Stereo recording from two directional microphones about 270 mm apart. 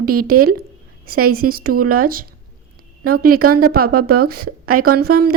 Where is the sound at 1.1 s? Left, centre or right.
Right.